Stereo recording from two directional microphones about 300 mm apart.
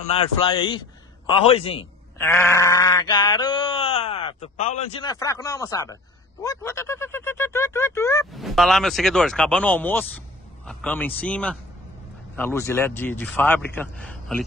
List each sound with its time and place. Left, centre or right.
0.0 s a man's voice: centre